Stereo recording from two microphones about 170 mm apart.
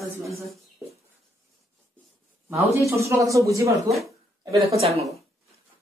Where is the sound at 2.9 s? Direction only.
15° right (ahead or behind).